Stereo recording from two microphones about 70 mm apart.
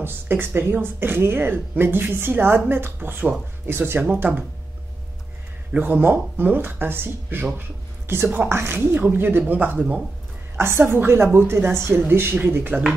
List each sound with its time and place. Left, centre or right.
0.0 s speech: right
5.7 s speech: right
10.6 s speech: right